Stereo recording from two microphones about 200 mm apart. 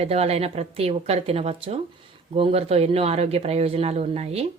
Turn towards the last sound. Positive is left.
turn(degrees=-30)  # may be behind; listen again after turning